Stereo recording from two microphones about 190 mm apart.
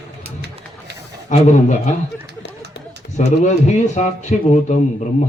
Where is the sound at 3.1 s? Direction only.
40° left (ahead or behind).